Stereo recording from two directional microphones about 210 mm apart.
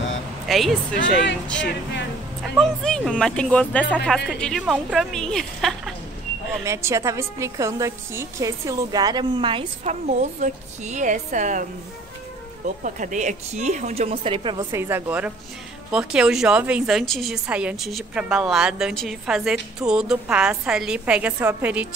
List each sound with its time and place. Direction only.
0.5 s a woman's voice: centre (ahead or behind)
2.6 s a woman's voice: centre (ahead or behind)
6.6 s a woman's voice: 15° right (ahead or behind); by 11.6 s 35° right (ahead or behind)
12.6 s a woman's voice: 35° right (ahead or behind); by 21.8 s 5° right (ahead or behind)